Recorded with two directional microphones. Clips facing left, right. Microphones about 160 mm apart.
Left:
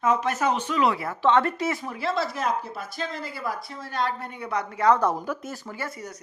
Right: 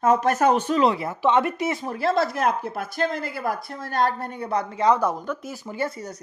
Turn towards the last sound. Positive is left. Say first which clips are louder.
# right 6 dB
turn(degrees=-25)  # may be behind; listen again after turning